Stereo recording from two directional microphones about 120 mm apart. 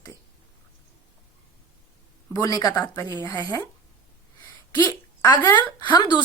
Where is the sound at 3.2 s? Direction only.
35° left (ahead or behind).